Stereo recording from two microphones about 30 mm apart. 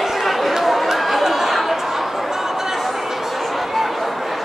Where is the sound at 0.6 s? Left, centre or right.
Centre.